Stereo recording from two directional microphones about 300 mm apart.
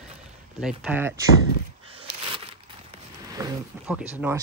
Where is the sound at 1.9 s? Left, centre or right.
Centre.